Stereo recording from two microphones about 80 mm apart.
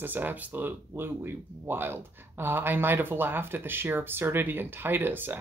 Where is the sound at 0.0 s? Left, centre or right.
Right.